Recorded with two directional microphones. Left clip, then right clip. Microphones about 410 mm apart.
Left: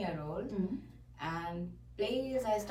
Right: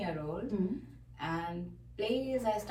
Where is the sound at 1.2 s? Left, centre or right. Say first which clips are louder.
Right 2 dB; centre.